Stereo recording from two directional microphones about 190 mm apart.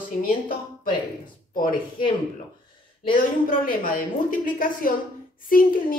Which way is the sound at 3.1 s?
45° left (ahead or behind).